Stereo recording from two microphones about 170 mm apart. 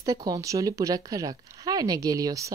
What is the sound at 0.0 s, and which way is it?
Speech, 20° right (ahead or behind).